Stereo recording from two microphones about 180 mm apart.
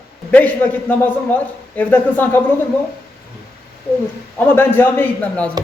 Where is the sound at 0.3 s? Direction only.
10° left (ahead or behind).